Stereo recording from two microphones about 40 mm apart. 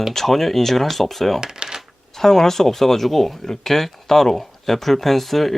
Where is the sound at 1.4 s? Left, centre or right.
Centre.